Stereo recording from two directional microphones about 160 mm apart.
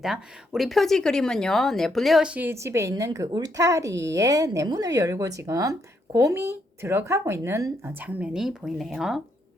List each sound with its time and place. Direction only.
0.0 s speech: centre (ahead or behind)